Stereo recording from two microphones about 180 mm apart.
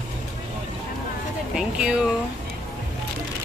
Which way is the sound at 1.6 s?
5° right (ahead or behind).